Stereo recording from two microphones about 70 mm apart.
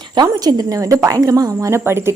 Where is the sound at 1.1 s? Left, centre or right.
Right.